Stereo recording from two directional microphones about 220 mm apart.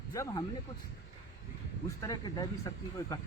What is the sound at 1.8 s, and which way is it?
Speech, 15° left (ahead or behind).